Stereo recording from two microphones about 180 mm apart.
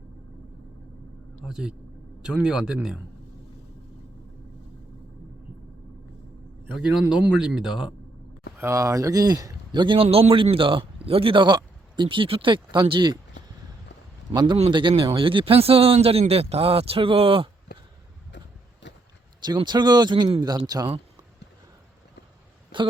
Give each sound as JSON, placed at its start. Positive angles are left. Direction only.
{"t": 1.5, "sound": "speech", "side_deg": 0}
{"t": 6.8, "sound": "speech", "side_deg": -5}
{"t": 8.5, "sound": "speech", "side_deg": -15}
{"t": 14.3, "sound": "speech", "side_deg": -25}
{"t": 19.5, "sound": "speech", "side_deg": -25}
{"t": 22.7, "sound": "a sound", "side_deg": -25}